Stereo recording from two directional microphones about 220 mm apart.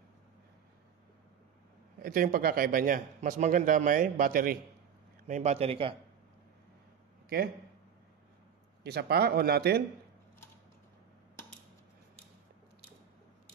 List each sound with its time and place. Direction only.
2.0 s a man's voice: 40° right (ahead or behind)
5.2 s a man's voice: 30° right (ahead or behind)
8.8 s speech: 45° right (ahead or behind)